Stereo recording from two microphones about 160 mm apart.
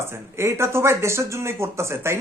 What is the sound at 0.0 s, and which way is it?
Speech, 15° right (ahead or behind).